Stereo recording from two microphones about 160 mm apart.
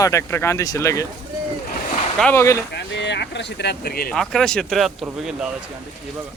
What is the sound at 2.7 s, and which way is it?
Speech, 90° left.